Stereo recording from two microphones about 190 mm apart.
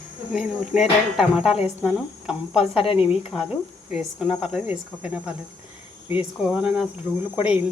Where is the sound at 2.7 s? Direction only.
30° left (ahead or behind).